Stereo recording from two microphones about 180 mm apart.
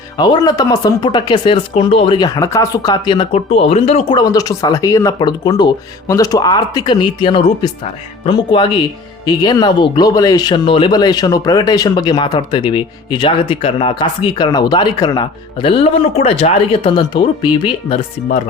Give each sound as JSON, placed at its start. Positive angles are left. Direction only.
{"t": 0.2, "sound": "speech", "side_deg": 20}
{"t": 4.2, "sound": "speech", "side_deg": 20}